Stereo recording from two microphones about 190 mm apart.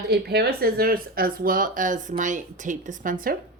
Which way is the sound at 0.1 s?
60° right (ahead or behind).